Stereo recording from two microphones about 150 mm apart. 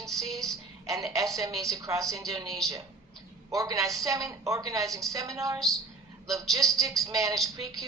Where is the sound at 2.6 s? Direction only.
Centre (ahead or behind).